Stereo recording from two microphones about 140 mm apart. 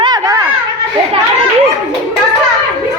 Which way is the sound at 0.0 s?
25° right (ahead or behind).